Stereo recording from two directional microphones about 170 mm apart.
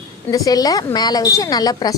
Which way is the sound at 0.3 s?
20° left (ahead or behind).